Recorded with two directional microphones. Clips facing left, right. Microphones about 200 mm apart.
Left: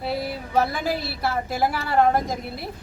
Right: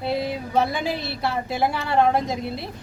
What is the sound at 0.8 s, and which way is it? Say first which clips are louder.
Speech: left 1 dB; 20° right (ahead or behind).